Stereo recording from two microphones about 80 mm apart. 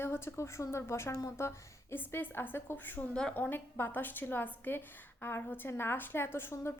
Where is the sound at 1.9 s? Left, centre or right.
Left.